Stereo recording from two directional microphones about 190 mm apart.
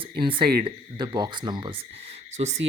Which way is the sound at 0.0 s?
25° right (ahead or behind).